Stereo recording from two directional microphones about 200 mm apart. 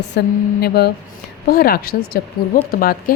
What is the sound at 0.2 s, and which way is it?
A woman's voice, 55° left (ahead or behind).